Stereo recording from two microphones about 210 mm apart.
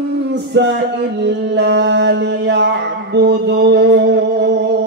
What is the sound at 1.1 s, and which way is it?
Mantra, 55° right (ahead or behind).